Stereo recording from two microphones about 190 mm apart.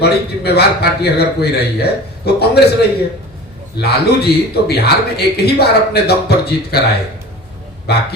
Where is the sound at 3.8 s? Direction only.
60° left (ahead or behind).